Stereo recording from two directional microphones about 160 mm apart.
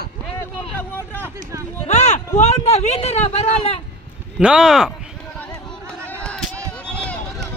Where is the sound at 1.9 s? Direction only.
45° left (ahead or behind).